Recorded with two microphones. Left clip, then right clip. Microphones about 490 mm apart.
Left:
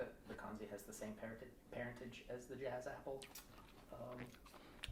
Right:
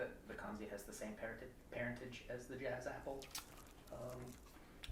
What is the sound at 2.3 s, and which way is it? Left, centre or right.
Speech, right.